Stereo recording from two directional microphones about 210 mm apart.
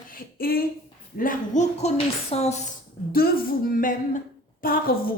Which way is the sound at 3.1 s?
45° left (ahead or behind).